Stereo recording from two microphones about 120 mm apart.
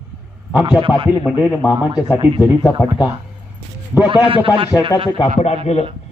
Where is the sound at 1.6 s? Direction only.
35° left (ahead or behind).